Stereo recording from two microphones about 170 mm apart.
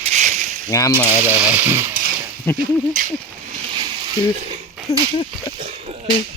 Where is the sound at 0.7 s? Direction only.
25° left (ahead or behind).